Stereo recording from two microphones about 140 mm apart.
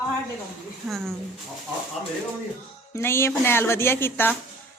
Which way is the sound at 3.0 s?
15° left (ahead or behind).